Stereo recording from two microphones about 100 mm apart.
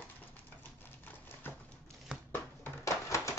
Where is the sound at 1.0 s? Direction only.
20° left (ahead or behind).